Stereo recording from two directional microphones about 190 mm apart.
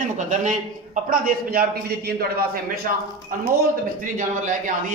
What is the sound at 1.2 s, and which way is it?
Speech, 50° right (ahead or behind).